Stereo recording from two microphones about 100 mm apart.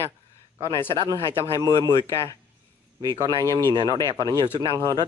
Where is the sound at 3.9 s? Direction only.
30° left (ahead or behind).